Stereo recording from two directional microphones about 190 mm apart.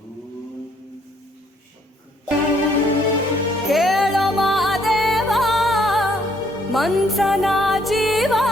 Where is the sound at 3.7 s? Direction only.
Centre (ahead or behind).